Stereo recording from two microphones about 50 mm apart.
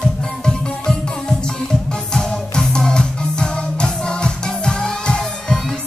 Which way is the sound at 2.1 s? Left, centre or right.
Centre.